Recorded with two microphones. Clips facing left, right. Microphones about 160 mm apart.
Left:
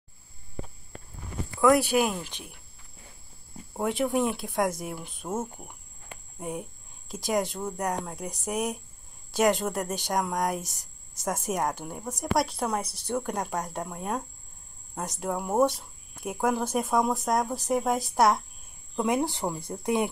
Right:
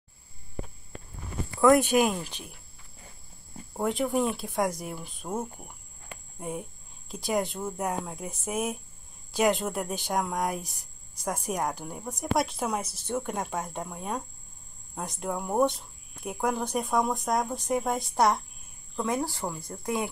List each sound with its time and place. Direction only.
1.6 s speech: 5° left (ahead or behind)
3.7 s speech: centre (ahead or behind)
18.9 s speech: 15° left (ahead or behind)